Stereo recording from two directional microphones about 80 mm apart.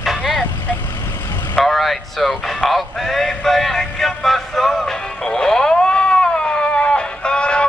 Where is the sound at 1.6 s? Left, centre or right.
Centre.